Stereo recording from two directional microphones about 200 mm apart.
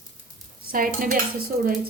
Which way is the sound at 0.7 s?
45° right (ahead or behind).